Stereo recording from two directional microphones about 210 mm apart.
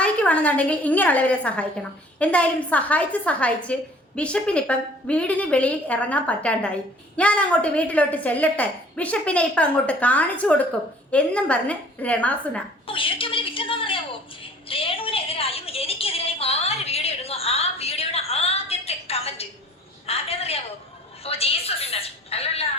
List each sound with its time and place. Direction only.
0.0 s a woman's voice: 5° left (ahead or behind)
12.9 s a woman's voice: 25° left (ahead or behind)